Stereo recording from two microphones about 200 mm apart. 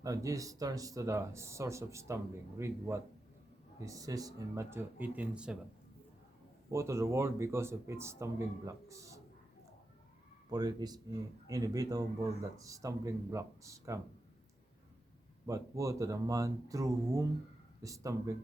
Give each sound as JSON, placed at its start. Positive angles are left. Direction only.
{"t": 0.0, "sound": "speech", "side_deg": -15}
{"t": 6.7, "sound": "speech", "side_deg": -15}
{"t": 10.5, "sound": "speech", "side_deg": -20}
{"t": 15.4, "sound": "speech", "side_deg": -15}